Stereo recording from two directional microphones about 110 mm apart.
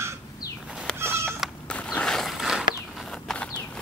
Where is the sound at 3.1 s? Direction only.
10° left (ahead or behind).